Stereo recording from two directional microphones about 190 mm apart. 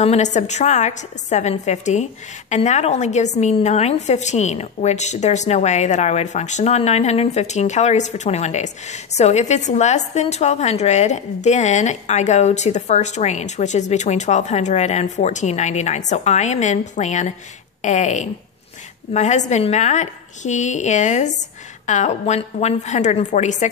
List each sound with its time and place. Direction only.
0.0 s a woman's voice: 35° left (ahead or behind)